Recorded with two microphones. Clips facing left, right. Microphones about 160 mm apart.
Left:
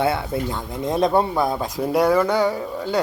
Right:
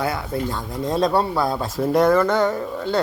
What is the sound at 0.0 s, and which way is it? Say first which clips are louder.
Speech: left 2 dB; 25° left (ahead or behind).